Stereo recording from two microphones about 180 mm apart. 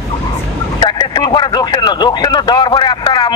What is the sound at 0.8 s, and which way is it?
Speech, 25° left (ahead or behind).